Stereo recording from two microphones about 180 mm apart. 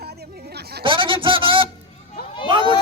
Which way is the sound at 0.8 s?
30° right (ahead or behind).